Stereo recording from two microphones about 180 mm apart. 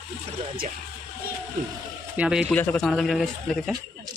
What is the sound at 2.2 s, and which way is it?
Speech, 5° right (ahead or behind).